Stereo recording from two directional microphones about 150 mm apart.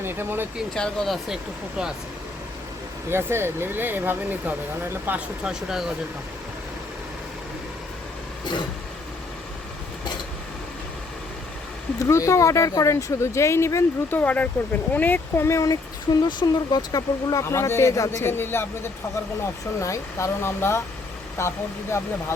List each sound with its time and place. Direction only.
0.0 s speech: 15° right (ahead or behind)
0.7 s speech: 5° left (ahead or behind)
3.1 s speech: 15° right (ahead or behind)
11.9 s speech: 20° left (ahead or behind)